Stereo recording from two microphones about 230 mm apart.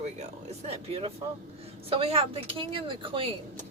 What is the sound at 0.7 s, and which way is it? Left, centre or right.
Speech, right.